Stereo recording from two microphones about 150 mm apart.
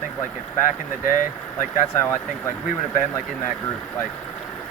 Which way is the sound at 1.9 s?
15° left (ahead or behind).